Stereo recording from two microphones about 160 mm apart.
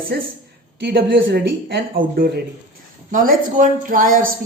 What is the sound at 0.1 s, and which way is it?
A woman's voice, 90° right.